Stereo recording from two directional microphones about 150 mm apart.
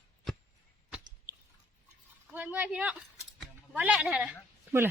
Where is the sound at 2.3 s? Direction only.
10° right (ahead or behind).